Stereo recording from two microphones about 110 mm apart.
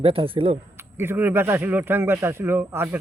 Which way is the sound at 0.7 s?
25° right (ahead or behind).